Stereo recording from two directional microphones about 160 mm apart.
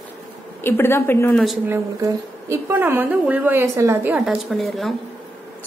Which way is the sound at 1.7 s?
20° right (ahead or behind).